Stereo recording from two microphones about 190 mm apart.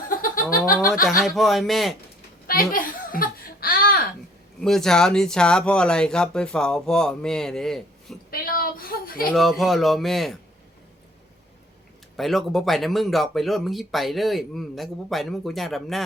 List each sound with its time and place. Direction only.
0.5 s snicker: 45° left (ahead or behind)
1.2 s speech: centre (ahead or behind)
2.5 s a sound: 45° left (ahead or behind)
4.6 s speech: centre (ahead or behind)
8.3 s a sound: 50° left (ahead or behind)
9.3 s speech: centre (ahead or behind)
12.1 s speech: centre (ahead or behind)